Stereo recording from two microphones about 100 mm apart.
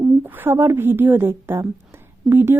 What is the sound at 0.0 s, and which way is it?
A woman's voice, 20° right (ahead or behind).